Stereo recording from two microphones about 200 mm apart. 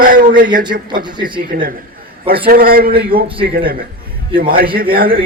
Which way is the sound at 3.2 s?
25° right (ahead or behind).